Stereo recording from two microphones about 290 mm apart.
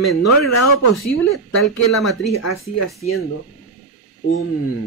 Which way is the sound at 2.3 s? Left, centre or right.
Left.